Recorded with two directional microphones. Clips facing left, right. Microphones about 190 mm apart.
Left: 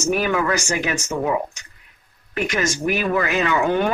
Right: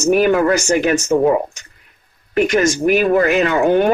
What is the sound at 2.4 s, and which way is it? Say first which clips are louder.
Speech: right 6 dB; 45° right (ahead or behind).